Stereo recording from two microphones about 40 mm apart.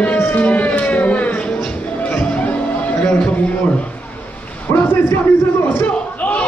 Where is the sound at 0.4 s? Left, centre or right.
Left.